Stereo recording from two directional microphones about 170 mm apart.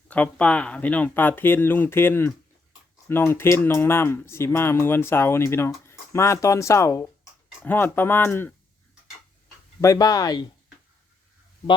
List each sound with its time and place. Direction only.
0.1 s speech: 5° left (ahead or behind)
9.8 s speech: 20° left (ahead or behind)